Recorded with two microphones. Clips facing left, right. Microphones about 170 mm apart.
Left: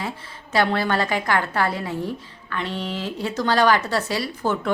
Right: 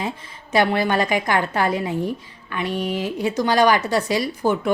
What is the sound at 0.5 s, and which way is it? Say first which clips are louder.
A woman's voice: right 2 dB; 15° right (ahead or behind).